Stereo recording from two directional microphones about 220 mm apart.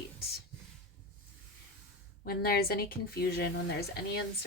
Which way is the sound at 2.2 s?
45° left (ahead or behind).